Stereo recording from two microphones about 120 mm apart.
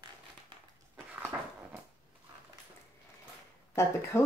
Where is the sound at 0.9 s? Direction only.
15° right (ahead or behind).